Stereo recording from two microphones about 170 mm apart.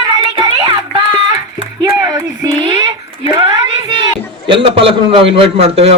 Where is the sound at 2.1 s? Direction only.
25° right (ahead or behind).